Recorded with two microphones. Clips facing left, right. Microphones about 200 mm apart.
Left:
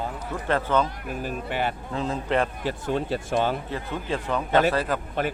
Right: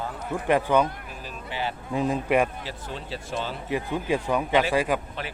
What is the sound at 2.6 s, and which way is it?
Speech, 55° left (ahead or behind).